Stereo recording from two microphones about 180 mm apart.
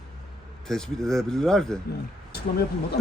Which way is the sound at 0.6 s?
Centre (ahead or behind).